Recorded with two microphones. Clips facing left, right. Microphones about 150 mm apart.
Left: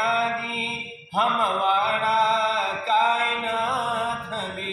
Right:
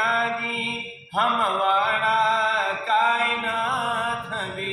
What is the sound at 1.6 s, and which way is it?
Mantra, centre (ahead or behind).